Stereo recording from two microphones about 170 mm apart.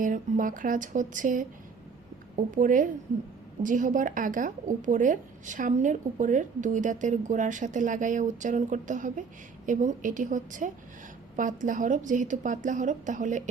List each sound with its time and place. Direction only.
0.0 s a woman's voice: 50° right (ahead or behind)